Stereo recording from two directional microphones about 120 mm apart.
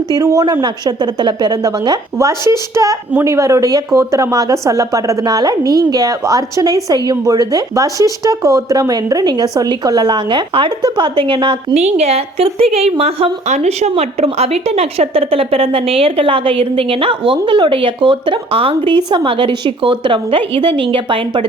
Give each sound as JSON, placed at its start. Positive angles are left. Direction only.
{"t": 0.1, "sound": "speech", "side_deg": -30}
{"t": 2.1, "sound": "speech", "side_deg": -25}
{"t": 11.7, "sound": "a woman's voice", "side_deg": -65}